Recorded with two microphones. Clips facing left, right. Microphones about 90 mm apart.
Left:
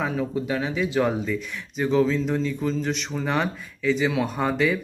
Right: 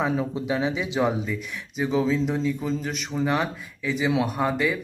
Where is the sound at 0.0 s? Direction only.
20° right (ahead or behind); by 4.8 s 5° right (ahead or behind).